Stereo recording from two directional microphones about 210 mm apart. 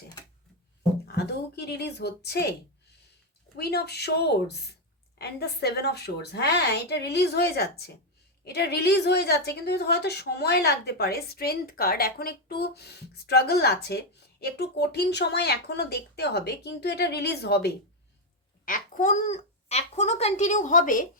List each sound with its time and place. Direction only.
1.0 s a sound: 50° left (ahead or behind)
3.6 s a woman's voice: 50° left (ahead or behind)
18.6 s speech: 40° left (ahead or behind)